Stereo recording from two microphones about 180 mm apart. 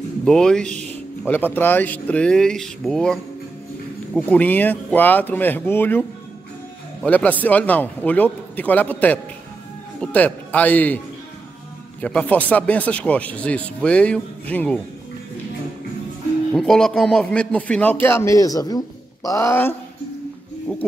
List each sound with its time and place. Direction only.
0.2 s a man's voice: 5° left (ahead or behind)
12.0 s speech: 5° left (ahead or behind)
16.5 s a man's voice: centre (ahead or behind)